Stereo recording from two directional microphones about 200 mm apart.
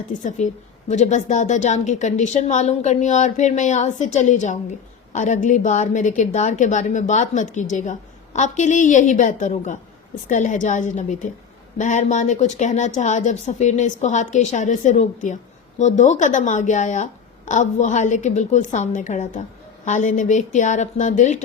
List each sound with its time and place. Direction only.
0.1 s a woman's voice: 40° left (ahead or behind)